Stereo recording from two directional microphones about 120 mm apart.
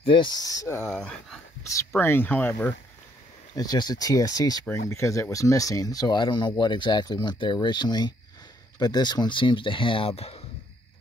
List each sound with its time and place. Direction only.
0.0 s speech: 45° left (ahead or behind); by 0.9 s 20° left (ahead or behind)
0.9 s speech: 5° left (ahead or behind)
2.0 s speech: 15° left (ahead or behind)
3.5 s speech: 35° left (ahead or behind); by 10.4 s 55° left (ahead or behind)